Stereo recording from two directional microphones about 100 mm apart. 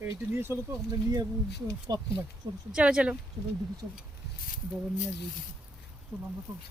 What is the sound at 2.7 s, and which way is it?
Speech, 10° right (ahead or behind).